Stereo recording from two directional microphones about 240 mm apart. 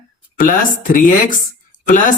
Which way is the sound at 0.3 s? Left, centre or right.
Left.